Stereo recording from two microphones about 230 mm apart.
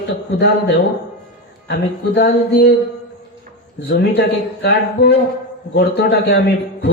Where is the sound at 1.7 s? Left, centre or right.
Left.